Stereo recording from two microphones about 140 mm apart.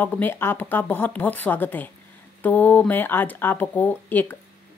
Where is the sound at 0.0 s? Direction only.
15° left (ahead or behind).